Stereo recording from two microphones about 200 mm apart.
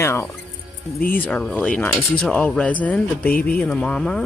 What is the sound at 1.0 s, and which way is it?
Speech, 45° left (ahead or behind).